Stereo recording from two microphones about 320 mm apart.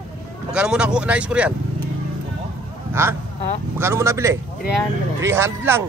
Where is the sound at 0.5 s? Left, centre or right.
Centre.